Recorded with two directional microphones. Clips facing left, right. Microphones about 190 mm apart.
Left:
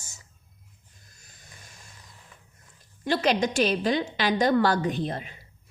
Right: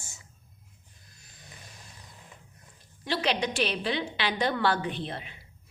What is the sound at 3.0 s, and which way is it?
Speech, 45° left (ahead or behind).